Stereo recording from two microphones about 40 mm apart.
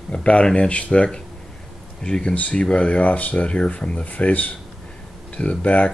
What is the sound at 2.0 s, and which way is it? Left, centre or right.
Speech, left.